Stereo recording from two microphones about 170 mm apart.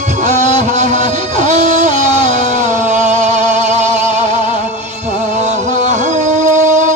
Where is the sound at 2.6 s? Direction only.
45° right (ahead or behind).